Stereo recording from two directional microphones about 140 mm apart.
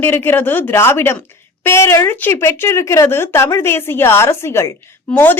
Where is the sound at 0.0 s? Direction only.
15° left (ahead or behind).